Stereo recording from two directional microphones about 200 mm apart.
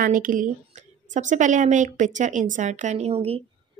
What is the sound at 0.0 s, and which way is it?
Speech, 45° right (ahead or behind).